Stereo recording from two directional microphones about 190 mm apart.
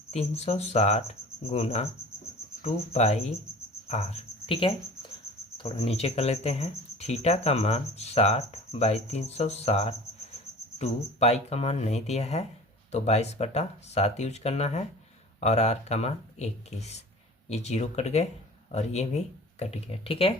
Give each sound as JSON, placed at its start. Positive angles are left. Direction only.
{"t": 0.1, "sound": "speech", "side_deg": 35}